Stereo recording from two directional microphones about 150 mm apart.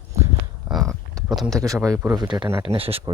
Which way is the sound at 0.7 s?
Centre (ahead or behind).